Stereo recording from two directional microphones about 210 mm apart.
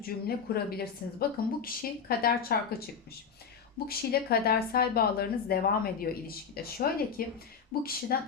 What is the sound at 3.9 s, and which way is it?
A woman's voice, 45° left (ahead or behind).